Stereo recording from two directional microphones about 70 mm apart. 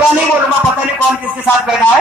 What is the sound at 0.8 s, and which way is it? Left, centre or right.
Speech, centre.